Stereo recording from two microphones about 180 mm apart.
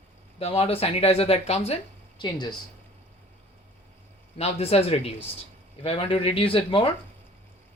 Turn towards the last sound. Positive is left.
turn(degrees=30)  # may be behind; listen again after turning